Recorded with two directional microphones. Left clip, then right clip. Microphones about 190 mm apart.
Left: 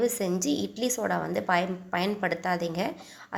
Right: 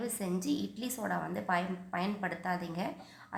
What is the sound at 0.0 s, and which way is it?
A woman's voice, 30° left (ahead or behind).